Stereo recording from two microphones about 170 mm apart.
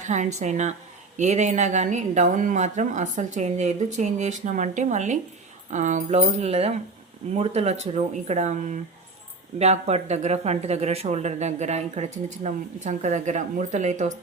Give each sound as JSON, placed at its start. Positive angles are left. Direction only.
{"t": 0.0, "sound": "speech", "side_deg": -45}
{"t": 6.1, "sound": "speech", "side_deg": -35}